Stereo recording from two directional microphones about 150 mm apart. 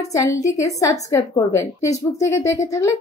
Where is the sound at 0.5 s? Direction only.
20° left (ahead or behind).